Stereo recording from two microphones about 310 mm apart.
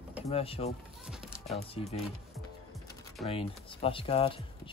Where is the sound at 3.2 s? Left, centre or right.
Centre.